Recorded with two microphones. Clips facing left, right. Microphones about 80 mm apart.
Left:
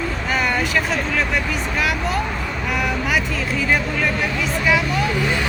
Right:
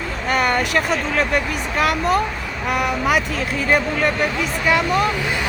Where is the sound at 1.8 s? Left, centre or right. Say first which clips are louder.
Right 6 dB; right.